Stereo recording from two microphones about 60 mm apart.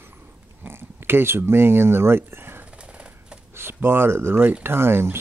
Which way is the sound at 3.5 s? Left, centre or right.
Right.